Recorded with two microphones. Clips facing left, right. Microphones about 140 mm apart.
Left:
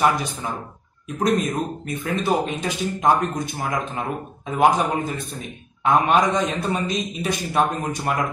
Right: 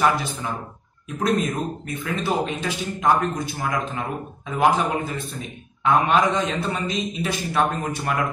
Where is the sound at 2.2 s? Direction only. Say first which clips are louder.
Left 1 dB; 20° left (ahead or behind).